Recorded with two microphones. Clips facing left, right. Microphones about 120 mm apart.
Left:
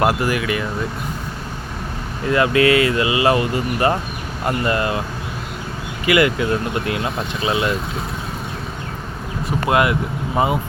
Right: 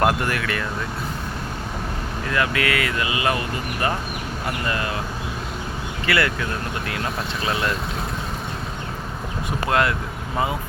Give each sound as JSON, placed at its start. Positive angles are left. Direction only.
{"t": 0.0, "sound": "speech", "side_deg": 5}
{"t": 2.3, "sound": "speech", "side_deg": 25}
{"t": 6.1, "sound": "speech", "side_deg": 15}
{"t": 7.4, "sound": "speech", "side_deg": 5}
{"t": 9.6, "sound": "speech", "side_deg": 15}